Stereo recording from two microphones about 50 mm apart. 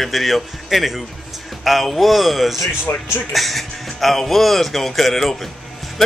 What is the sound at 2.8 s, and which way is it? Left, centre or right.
Speech, left.